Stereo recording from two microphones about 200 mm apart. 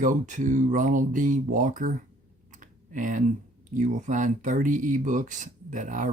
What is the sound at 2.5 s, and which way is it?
Clicking, 40° right (ahead or behind).